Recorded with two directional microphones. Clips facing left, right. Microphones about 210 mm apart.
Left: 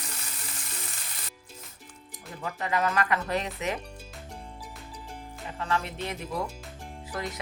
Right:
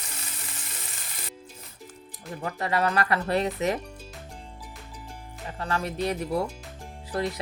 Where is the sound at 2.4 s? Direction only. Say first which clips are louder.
Right 2 dB; 35° right (ahead or behind).